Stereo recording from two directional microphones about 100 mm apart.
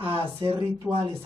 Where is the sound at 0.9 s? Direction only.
Centre (ahead or behind).